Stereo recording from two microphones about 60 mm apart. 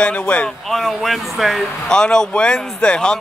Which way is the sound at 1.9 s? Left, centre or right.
Centre.